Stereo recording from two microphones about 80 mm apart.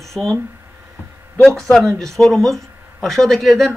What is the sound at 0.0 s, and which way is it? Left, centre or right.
Speech, centre.